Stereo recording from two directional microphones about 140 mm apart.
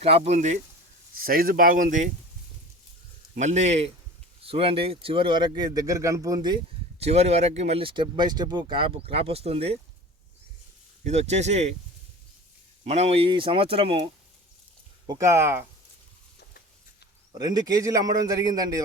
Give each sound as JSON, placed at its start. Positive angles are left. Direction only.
{"t": 0.0, "sound": "speech", "side_deg": -50}
{"t": 1.2, "sound": "speech", "side_deg": -90}
{"t": 3.3, "sound": "speech", "side_deg": -55}
{"t": 7.0, "sound": "speech", "side_deg": -50}
{"t": 11.0, "sound": "speech", "side_deg": -50}
{"t": 12.8, "sound": "speech", "side_deg": -50}
{"t": 15.0, "sound": "a man's voice", "side_deg": -25}
{"t": 17.3, "sound": "a man's voice", "side_deg": -30}